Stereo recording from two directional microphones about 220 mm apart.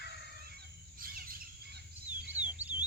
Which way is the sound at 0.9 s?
40° right (ahead or behind).